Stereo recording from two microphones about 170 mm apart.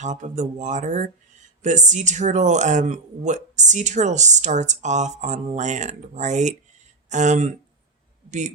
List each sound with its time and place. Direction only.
0.0 s speech: 45° right (ahead or behind)